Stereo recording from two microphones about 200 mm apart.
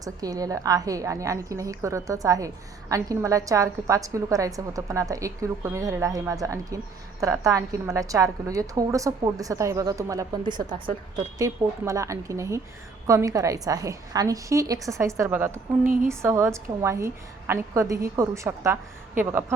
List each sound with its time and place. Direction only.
0.0 s a woman's voice: 20° right (ahead or behind)
15.8 s speech: 40° right (ahead or behind)
16.0 s a woman's voice: 15° right (ahead or behind)